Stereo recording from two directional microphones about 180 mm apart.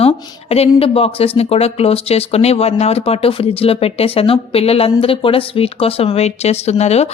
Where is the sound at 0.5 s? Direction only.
35° left (ahead or behind).